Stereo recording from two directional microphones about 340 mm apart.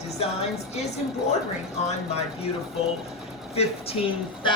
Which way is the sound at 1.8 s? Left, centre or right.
Centre.